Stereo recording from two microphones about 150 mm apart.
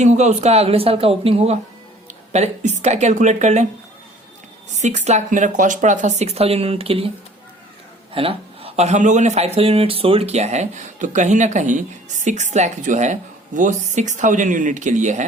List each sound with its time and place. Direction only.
0.0 s speech: 50° right (ahead or behind)
4.7 s speech: 50° right (ahead or behind)
8.1 s speech: 40° right (ahead or behind)